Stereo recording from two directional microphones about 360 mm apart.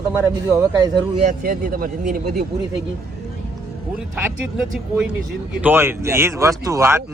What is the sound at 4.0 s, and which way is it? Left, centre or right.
Speech, centre.